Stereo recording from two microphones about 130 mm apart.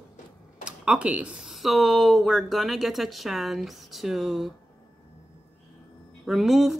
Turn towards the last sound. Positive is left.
turn(degrees=0)  # may be behind; listen again after turning